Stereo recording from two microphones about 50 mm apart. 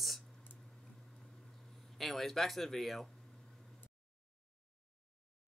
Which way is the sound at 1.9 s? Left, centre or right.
Centre.